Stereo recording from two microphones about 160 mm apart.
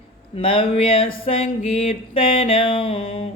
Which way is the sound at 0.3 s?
35° left (ahead or behind).